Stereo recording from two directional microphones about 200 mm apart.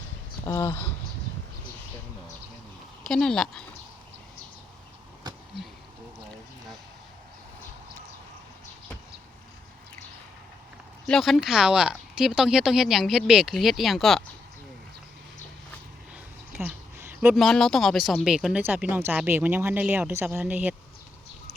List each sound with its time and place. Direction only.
0.4 s speech: 20° left (ahead or behind)
3.0 s speech: 5° left (ahead or behind)
11.0 s speech: centre (ahead or behind)
16.6 s a sound: 10° right (ahead or behind)
17.4 s speech: centre (ahead or behind)